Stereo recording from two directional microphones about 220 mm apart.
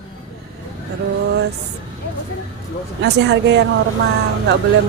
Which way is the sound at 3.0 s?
55° right (ahead or behind).